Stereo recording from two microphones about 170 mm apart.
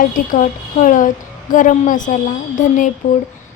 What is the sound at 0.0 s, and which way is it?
A woman's voice, 55° left (ahead or behind).